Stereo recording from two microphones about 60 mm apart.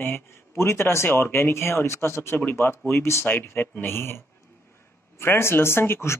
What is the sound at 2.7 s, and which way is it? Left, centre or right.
Speech, left.